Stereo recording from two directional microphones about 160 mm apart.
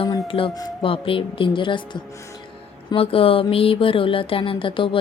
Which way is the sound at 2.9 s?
35° left (ahead or behind).